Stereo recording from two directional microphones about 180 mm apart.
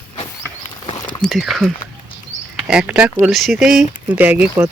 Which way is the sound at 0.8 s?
25° left (ahead or behind).